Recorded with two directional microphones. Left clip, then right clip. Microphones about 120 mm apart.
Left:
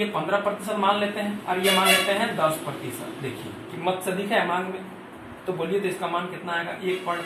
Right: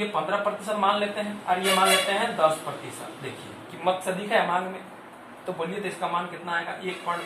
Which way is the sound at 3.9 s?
15° right (ahead or behind).